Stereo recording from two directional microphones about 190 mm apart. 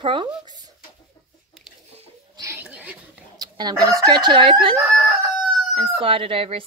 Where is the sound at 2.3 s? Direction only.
10° right (ahead or behind).